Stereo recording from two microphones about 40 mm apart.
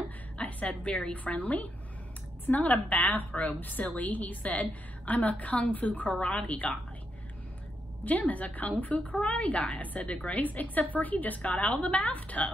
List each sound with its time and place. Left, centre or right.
0.4 s a woman's voice: left
6.0 s a woman's voice: left
8.0 s a woman's voice: left
11.6 s a woman's voice: left
12.0 s a woman's voice: left